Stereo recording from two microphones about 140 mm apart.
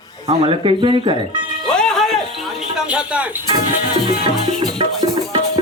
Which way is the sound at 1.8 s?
5° left (ahead or behind).